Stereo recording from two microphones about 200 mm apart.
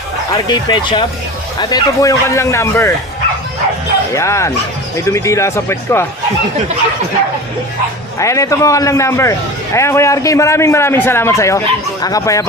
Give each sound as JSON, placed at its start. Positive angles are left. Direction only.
{"t": 0.4, "sound": "a man's voice", "side_deg": 20}
{"t": 4.1, "sound": "a man's voice", "side_deg": 15}
{"t": 8.2, "sound": "a man's voice", "side_deg": 15}